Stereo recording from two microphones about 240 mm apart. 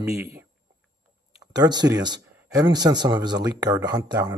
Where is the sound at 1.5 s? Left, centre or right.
Centre.